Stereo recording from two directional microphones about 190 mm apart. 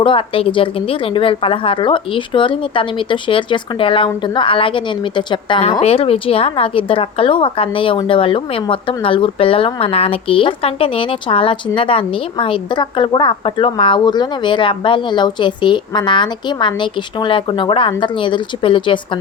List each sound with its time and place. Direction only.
0.0 s a woman's voice: 30° left (ahead or behind)